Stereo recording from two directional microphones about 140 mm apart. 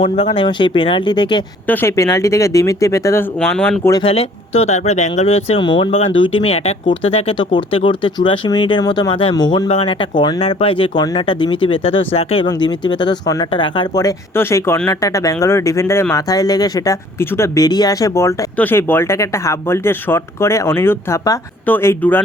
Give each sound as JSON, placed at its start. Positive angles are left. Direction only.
{"t": 0.0, "sound": "speech", "side_deg": 40}
{"t": 1.6, "sound": "speech", "side_deg": 15}
{"t": 4.0, "sound": "speech", "side_deg": 45}
{"t": 9.6, "sound": "speech", "side_deg": 40}
{"t": 12.5, "sound": "speech", "side_deg": 30}